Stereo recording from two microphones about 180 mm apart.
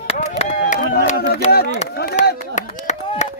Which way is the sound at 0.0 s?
35° left (ahead or behind).